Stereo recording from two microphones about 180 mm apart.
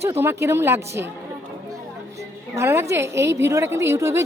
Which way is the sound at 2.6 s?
15° right (ahead or behind).